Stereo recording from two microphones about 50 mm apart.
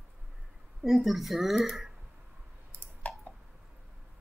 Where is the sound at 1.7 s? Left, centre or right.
Centre.